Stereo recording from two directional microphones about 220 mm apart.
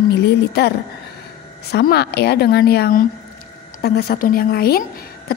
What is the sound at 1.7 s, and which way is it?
A woman's voice, 45° left (ahead or behind).